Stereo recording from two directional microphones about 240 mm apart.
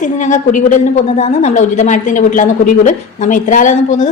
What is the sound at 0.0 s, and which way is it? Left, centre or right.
A woman's voice, left.